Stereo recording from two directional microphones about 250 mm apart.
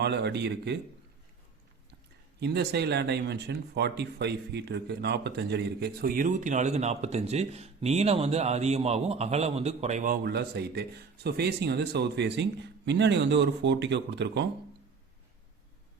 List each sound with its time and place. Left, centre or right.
0.0 s a man's voice: right
2.4 s speech: right